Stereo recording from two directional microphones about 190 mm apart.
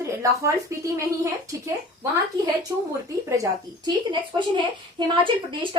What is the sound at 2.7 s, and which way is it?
A woman's voice, 15° right (ahead or behind).